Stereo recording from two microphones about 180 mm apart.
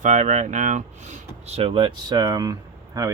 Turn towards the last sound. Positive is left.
turn(degrees=-20)  # may be behind; listen again after turning